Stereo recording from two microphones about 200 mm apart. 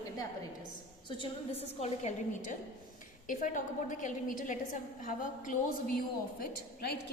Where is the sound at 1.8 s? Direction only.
35° left (ahead or behind).